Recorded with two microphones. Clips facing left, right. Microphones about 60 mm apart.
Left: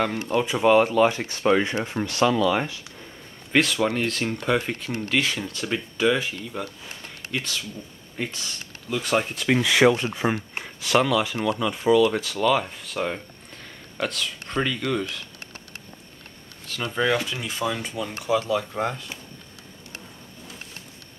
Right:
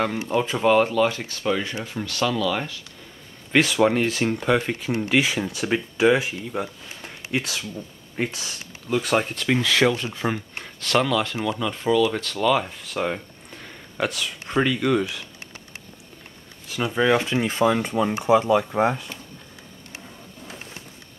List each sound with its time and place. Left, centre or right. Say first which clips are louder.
0.5 s speech: left 1 dB; centre
3.5 s speech: right 3 dB; centre
9.0 s speech: left 2 dB; centre
9.6 s speech: left 3 dB; centre
10.6 s speech: left 1 dB; centre
16.6 s speech: right 3 dB; centre
17.1 s speech: right 5 dB; right
18.2 s speech: right 4 dB; right